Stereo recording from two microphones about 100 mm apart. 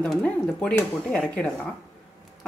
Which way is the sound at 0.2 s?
10° left (ahead or behind).